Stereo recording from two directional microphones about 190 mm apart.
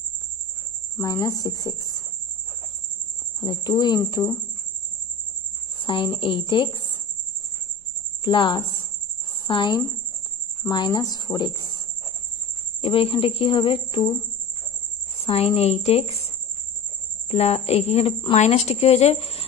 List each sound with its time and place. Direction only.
0.9 s speech: 15° left (ahead or behind)
3.3 s speech: 20° left (ahead or behind)
5.8 s speech: 25° left (ahead or behind)
8.2 s speech: 25° left (ahead or behind)
12.8 s speech: 30° left (ahead or behind)
15.1 s a woman's voice: 30° left (ahead or behind)
17.3 s a woman's voice: 35° left (ahead or behind)